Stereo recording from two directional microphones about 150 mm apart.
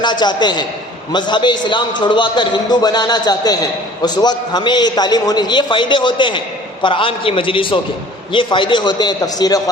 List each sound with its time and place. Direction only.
0.0 s a man's voice: 30° left (ahead or behind)